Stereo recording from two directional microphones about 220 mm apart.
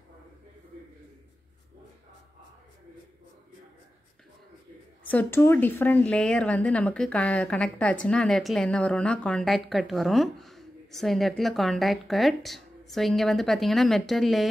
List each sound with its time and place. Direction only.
5.1 s speech: 10° left (ahead or behind)